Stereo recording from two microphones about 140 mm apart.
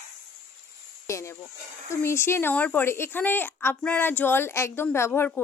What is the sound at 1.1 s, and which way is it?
A woman's voice, 20° left (ahead or behind).